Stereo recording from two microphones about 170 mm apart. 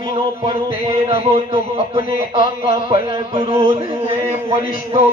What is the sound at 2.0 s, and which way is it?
Speech, 35° right (ahead or behind).